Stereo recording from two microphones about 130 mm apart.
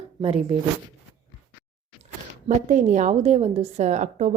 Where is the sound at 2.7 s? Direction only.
70° right (ahead or behind).